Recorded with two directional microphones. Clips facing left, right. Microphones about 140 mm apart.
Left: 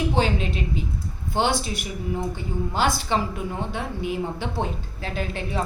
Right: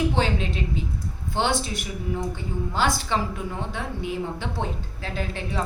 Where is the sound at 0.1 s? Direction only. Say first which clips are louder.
Left 2 dB; 10° left (ahead or behind).